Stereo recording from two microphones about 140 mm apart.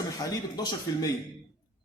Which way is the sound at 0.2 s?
30° left (ahead or behind).